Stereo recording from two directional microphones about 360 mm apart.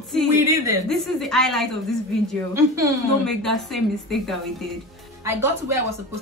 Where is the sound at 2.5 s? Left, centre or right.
Centre.